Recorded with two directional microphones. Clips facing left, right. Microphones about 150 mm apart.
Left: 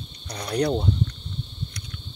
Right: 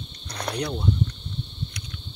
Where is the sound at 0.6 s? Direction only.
35° left (ahead or behind).